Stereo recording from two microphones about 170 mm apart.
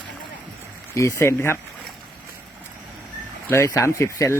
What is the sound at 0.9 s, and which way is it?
Speech, 15° left (ahead or behind).